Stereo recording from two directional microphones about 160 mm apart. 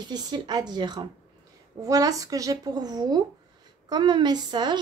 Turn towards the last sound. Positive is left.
turn(degrees=-25)  # may be behind; listen again after turning